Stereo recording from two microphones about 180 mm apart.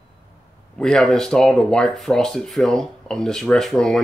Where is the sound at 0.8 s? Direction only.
5° left (ahead or behind).